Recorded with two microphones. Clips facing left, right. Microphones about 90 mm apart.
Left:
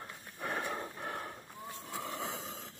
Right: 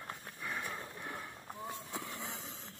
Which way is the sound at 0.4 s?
45° left (ahead or behind).